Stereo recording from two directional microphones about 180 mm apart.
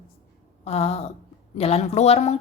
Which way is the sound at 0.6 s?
35° left (ahead or behind).